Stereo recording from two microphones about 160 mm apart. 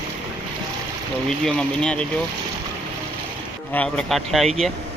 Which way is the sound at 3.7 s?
5° left (ahead or behind).